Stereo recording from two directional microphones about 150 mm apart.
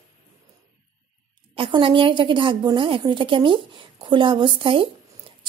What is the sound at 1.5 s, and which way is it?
A woman's voice, 35° right (ahead or behind).